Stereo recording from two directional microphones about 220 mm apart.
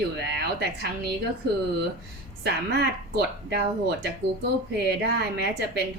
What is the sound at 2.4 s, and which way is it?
Speech, 45° right (ahead or behind).